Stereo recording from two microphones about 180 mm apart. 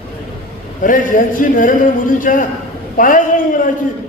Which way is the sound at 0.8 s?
50° left (ahead or behind).